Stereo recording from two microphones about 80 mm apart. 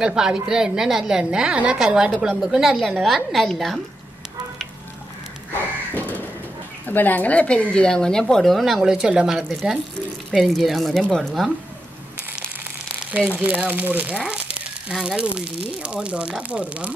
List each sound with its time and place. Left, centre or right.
0.0 s a woman's voice: centre
5.9 s a sound: left
6.9 s a woman's voice: left; by 11.5 s centre
13.3 s speech: right